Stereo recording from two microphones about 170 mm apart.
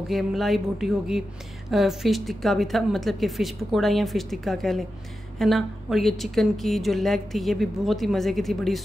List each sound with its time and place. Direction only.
0.1 s a woman's voice: centre (ahead or behind)